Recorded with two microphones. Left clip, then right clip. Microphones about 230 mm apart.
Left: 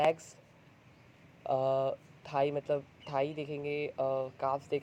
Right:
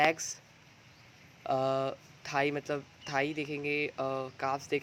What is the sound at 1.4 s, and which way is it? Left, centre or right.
Speech, right.